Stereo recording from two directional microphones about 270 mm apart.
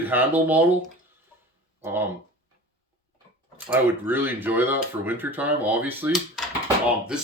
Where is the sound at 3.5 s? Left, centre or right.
Centre.